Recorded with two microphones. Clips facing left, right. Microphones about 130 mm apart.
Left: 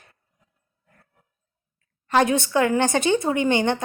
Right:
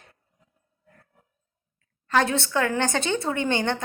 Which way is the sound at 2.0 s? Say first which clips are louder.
Left 3 dB; 15° left (ahead or behind).